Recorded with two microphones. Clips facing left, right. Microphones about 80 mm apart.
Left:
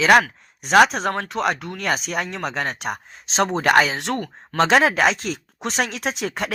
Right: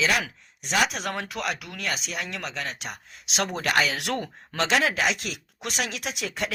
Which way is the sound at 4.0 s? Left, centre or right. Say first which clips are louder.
Left 4 dB; left.